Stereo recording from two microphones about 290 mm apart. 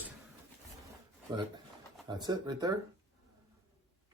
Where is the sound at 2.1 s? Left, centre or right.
Centre.